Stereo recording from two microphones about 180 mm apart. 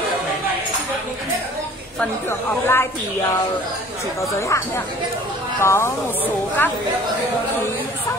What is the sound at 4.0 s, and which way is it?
Speech, 15° left (ahead or behind).